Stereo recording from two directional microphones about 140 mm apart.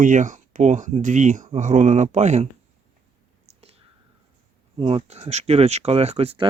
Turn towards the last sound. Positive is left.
turn(degrees=-40)  # may be behind; listen again after turning